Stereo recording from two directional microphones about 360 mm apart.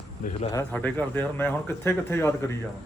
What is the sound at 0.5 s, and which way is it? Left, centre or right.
Speech, centre.